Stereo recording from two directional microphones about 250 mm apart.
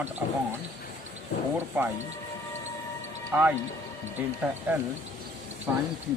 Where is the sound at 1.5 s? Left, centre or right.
Centre.